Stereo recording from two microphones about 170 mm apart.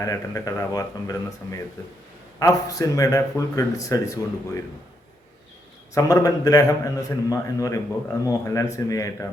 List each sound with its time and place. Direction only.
0.0 s a man's voice: 20° left (ahead or behind)
5.9 s a man's voice: 20° left (ahead or behind)